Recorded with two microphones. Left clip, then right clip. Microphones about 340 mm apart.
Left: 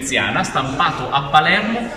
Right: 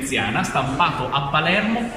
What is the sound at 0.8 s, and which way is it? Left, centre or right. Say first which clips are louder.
Speech: left 3 dB; centre.